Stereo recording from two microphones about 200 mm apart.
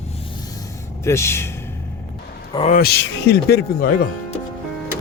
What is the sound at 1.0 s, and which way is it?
Speech, 15° left (ahead or behind).